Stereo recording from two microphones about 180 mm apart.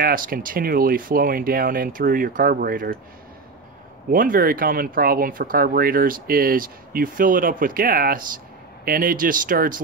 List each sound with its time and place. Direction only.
0.0 s speech: 50° right (ahead or behind)
4.1 s speech: 50° right (ahead or behind)